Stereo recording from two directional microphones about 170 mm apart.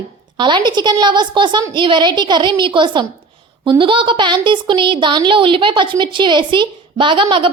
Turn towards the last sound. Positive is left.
turn(degrees=-30)  # may be behind; listen again after turning